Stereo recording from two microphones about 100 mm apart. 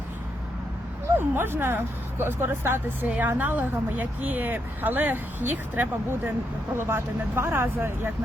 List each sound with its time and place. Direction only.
1.4 s speech: 20° right (ahead or behind)